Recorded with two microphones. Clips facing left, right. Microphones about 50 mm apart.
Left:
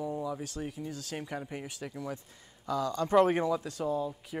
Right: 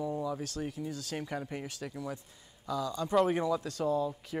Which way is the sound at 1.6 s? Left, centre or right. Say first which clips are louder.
Even; left.